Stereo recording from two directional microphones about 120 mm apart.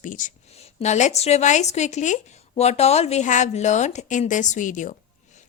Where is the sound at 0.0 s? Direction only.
90° left.